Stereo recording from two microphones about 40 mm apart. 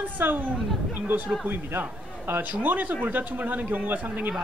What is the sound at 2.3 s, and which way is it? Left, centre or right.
A man's voice, right.